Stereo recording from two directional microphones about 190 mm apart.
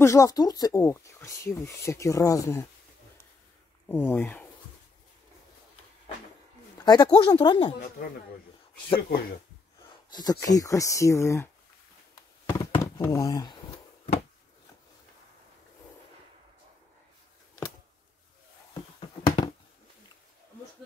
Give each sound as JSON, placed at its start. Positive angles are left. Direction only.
{"t": 0.0, "sound": "speech", "side_deg": 15}
{"t": 3.9, "sound": "speech", "side_deg": 10}
{"t": 6.8, "sound": "speech", "side_deg": 20}
{"t": 10.1, "sound": "speech", "side_deg": 20}
{"t": 12.2, "sound": "a sound", "side_deg": 20}
{"t": 18.9, "sound": "a sound", "side_deg": 25}